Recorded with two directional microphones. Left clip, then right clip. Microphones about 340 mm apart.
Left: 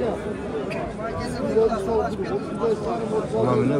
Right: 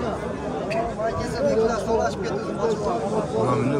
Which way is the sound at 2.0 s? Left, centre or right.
Right.